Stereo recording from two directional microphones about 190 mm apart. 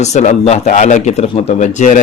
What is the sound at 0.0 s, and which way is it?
Speech, 35° left (ahead or behind).